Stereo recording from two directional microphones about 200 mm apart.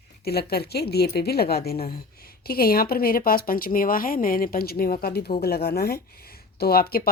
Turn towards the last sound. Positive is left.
turn(degrees=50)  # may be behind; listen again after turning